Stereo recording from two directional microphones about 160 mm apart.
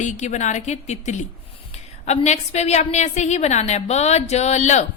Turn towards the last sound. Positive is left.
turn(degrees=45)  # may be behind; listen again after turning